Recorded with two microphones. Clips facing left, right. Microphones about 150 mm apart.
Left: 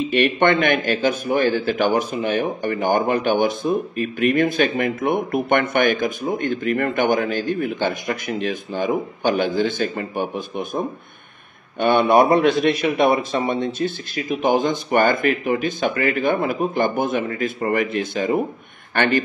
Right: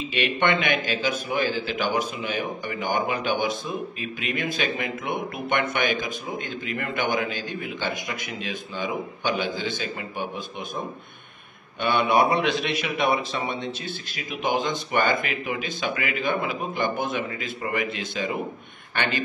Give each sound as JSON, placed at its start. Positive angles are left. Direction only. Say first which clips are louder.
{"t": 0.1, "sound": "speech", "louder": "left 6 dB", "side_deg": 50}
{"t": 11.8, "sound": "speech", "louder": "left 6 dB", "side_deg": 50}